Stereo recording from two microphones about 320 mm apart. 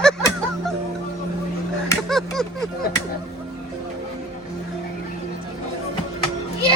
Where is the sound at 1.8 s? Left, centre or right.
Centre.